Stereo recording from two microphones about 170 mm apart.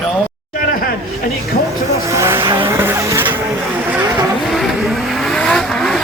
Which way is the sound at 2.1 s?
15° right (ahead or behind).